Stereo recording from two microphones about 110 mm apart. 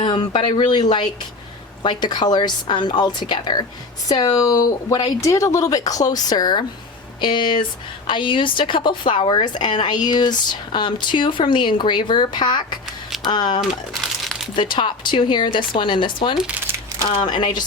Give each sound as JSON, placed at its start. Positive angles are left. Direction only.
{"t": 0.0, "sound": "speech", "side_deg": 50}
{"t": 13.6, "sound": "crumpling", "side_deg": 0}
{"t": 14.5, "sound": "speech", "side_deg": 50}